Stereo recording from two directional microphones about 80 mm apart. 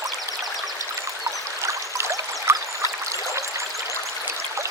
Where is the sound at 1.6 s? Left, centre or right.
Right.